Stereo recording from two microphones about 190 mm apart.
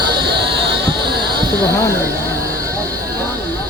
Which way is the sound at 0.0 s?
25° right (ahead or behind).